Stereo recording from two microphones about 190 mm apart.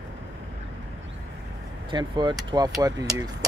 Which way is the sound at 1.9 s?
25° right (ahead or behind).